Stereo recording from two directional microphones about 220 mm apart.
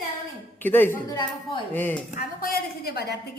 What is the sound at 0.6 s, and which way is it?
Speech, 10° left (ahead or behind).